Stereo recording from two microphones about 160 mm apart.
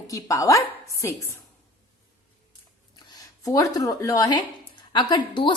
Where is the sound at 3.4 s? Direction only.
20° left (ahead or behind).